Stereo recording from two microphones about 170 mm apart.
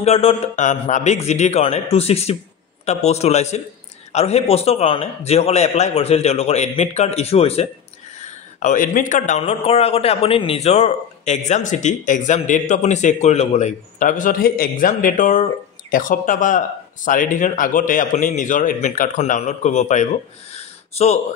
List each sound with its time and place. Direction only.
0.0 s speech: 35° left (ahead or behind)
9.4 s speech: 40° left (ahead or behind)
20.5 s a sound: 40° left (ahead or behind)